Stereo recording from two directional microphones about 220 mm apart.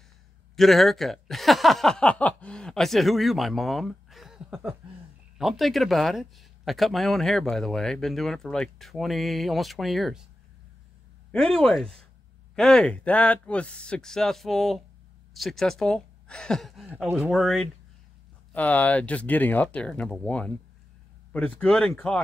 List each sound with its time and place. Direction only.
0.6 s speech: centre (ahead or behind)
11.5 s speech: 5° left (ahead or behind)
21.5 s speech: 5° left (ahead or behind)